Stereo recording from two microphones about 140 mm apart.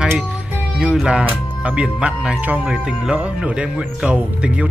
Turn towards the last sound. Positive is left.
turn(degrees=-10)  # may be behind; listen again after turning